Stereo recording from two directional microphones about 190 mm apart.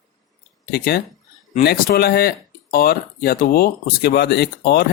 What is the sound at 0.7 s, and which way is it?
Speech, 55° left (ahead or behind).